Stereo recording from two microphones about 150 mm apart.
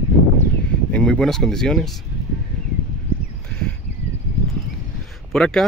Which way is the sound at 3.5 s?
5° left (ahead or behind).